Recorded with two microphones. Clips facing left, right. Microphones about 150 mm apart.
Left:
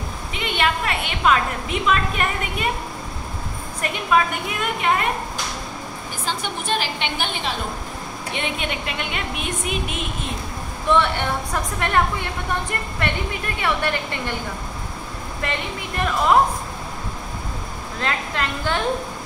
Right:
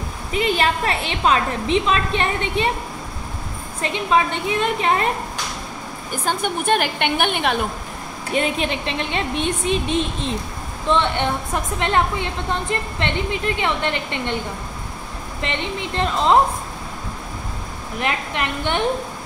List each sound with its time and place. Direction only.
0.3 s a woman's voice: 35° right (ahead or behind)
3.8 s a woman's voice: 25° right (ahead or behind)
6.2 s a woman's voice: 55° right (ahead or behind)
8.3 s a woman's voice: 35° right (ahead or behind)
15.4 s a woman's voice: 25° right (ahead or behind)
17.9 s a woman's voice: 20° right (ahead or behind)